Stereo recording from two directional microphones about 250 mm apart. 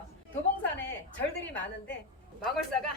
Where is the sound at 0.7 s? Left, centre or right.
Centre.